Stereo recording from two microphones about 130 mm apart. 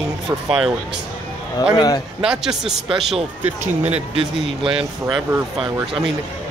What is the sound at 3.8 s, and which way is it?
Speech, 50° right (ahead or behind).